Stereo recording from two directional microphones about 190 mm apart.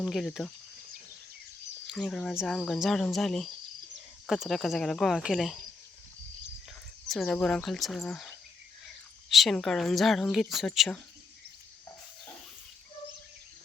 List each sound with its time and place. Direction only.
0.0 s speech: centre (ahead or behind)
1.9 s speech: 5° left (ahead or behind)
7.1 s speech: 5° left (ahead or behind)
9.3 s speech: centre (ahead or behind)